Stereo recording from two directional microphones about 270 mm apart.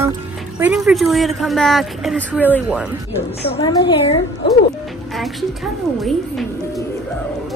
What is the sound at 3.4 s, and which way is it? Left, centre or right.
Speech, centre.